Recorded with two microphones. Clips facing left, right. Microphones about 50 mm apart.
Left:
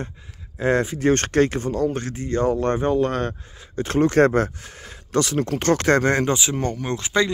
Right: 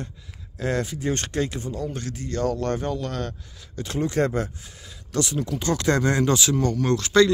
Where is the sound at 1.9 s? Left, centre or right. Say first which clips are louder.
Left 5 dB; left.